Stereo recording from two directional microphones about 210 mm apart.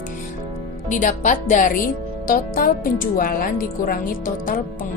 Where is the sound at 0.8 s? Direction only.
35° left (ahead or behind).